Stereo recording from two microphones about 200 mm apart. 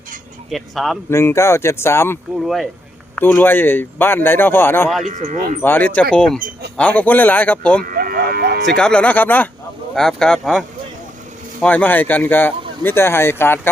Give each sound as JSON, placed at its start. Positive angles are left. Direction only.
{"t": 0.5, "sound": "speech", "side_deg": 0}
{"t": 1.1, "sound": "speech", "side_deg": 15}
{"t": 2.4, "sound": "speech", "side_deg": 0}
{"t": 5.0, "sound": "speech", "side_deg": -40}
{"t": 5.6, "sound": "speech", "side_deg": 10}
{"t": 7.9, "sound": "livestock", "side_deg": -50}
{"t": 8.8, "sound": "speech", "side_deg": 5}